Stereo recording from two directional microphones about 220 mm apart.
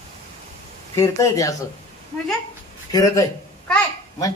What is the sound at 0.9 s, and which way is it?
Speech, 15° left (ahead or behind).